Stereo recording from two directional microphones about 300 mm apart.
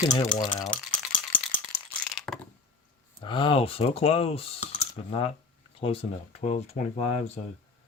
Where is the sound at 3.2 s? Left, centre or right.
Centre.